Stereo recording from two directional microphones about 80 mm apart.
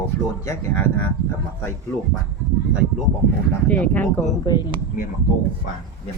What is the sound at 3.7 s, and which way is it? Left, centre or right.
Speech, centre.